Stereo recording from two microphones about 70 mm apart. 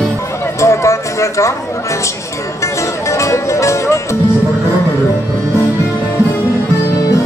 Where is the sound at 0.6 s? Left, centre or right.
Left.